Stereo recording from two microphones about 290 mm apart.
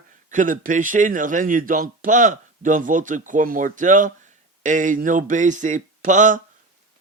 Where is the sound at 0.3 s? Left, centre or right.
Right.